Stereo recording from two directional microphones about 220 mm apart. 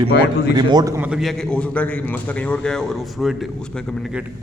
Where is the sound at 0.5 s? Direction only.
20° right (ahead or behind); by 3.3 s centre (ahead or behind).